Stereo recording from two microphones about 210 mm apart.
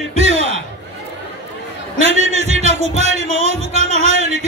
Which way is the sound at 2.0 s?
30° right (ahead or behind).